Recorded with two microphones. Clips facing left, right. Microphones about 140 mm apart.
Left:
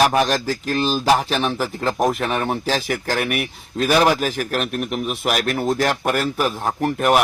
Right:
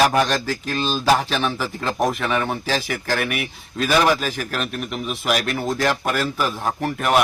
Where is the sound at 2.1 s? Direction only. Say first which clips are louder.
Left 1 dB; 45° left (ahead or behind).